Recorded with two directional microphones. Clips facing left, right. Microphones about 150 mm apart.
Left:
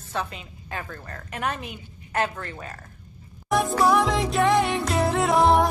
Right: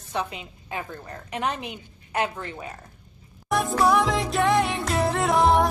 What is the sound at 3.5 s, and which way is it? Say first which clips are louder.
Music: left 1 dB; centre (ahead or behind).